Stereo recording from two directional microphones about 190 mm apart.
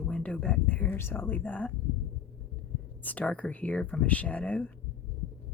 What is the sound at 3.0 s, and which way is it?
Speech, 10° left (ahead or behind).